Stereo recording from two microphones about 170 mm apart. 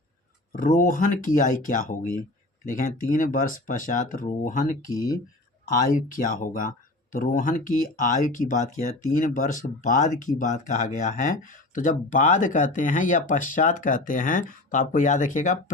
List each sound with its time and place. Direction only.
0.5 s speech: 50° left (ahead or behind)